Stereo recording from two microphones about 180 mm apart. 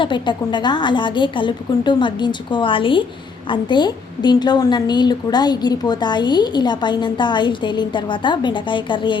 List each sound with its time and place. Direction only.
0.0 s a woman's voice: 25° left (ahead or behind)